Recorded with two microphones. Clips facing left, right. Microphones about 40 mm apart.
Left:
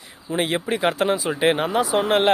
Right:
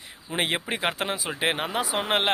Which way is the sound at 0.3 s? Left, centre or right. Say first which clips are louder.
Left 4 dB; right.